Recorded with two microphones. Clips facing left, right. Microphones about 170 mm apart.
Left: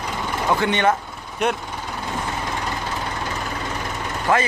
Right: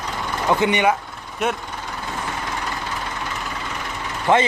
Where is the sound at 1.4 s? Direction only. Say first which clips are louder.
Left 1 dB; centre (ahead or behind).